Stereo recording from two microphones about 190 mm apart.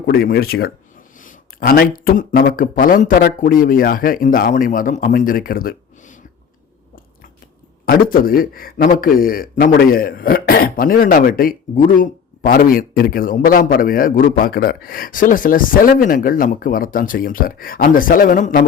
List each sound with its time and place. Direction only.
0.0 s a man's voice: 50° left (ahead or behind)
7.9 s a man's voice: 50° left (ahead or behind)